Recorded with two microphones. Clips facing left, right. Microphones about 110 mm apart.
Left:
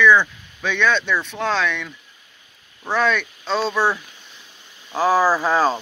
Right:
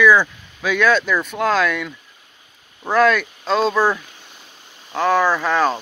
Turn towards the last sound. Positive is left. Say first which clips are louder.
# even
turn(degrees=10)  # may be behind; listen again after turning